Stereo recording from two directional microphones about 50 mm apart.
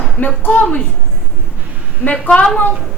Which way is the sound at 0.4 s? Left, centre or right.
Left.